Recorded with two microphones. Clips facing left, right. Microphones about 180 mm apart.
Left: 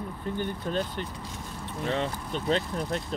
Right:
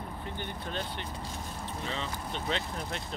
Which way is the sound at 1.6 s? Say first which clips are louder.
Left 9 dB; 55° left (ahead or behind).